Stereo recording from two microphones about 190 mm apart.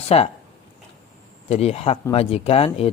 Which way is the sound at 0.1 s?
30° left (ahead or behind).